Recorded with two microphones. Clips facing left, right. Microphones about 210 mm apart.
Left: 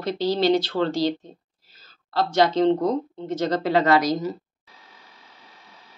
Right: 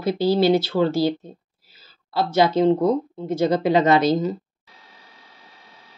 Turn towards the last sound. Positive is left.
turn(degrees=-20)  # may be behind; listen again after turning